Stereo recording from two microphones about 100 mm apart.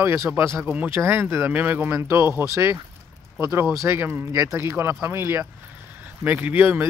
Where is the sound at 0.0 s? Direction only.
25° right (ahead or behind).